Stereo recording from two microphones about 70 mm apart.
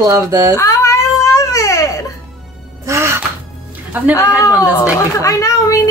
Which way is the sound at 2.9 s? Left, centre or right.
Right.